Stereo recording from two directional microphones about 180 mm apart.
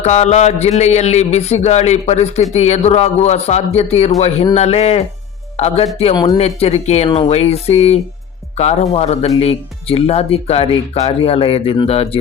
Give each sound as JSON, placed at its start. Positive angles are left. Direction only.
{"t": 0.0, "sound": "speech", "side_deg": 40}